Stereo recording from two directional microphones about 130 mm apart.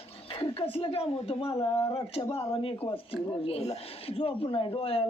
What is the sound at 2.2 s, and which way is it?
Speech, 40° left (ahead or behind).